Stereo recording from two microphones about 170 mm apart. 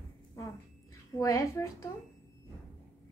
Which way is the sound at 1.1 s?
20° left (ahead or behind).